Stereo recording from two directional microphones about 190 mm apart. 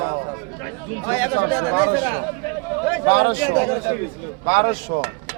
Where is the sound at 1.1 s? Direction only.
15° right (ahead or behind).